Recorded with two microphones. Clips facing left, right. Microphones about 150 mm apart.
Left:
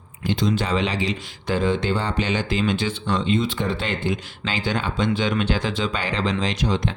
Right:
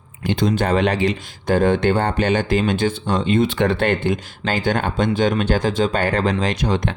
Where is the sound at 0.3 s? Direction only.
55° right (ahead or behind).